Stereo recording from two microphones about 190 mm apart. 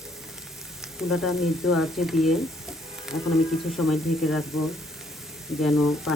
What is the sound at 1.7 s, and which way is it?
Speech, centre (ahead or behind).